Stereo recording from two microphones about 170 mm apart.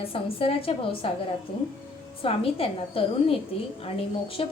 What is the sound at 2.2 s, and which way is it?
A woman's voice, 35° left (ahead or behind).